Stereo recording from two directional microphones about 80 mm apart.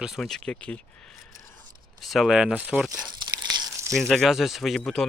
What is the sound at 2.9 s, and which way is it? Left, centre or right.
Crumpling, right.